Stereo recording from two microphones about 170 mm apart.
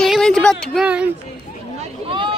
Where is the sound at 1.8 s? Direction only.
30° right (ahead or behind).